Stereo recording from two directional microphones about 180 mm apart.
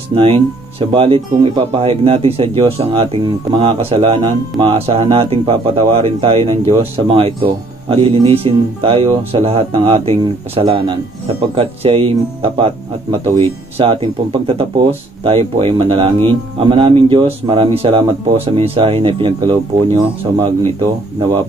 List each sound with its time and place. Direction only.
0.1 s speech: 30° right (ahead or behind)